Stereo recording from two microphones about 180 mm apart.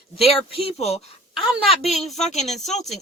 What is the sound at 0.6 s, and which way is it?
Speech, 35° left (ahead or behind).